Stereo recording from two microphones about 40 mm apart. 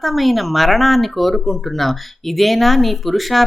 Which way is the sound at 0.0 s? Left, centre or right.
Centre.